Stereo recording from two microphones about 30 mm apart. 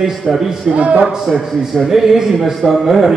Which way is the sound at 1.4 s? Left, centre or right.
Centre.